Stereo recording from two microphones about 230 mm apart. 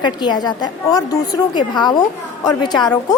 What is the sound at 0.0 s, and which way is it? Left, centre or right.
A woman's voice, centre.